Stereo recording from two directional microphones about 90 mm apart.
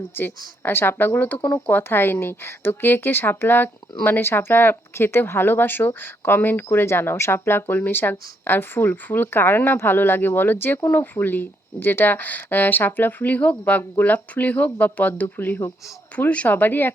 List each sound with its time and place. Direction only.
0.2 s speech: 20° left (ahead or behind)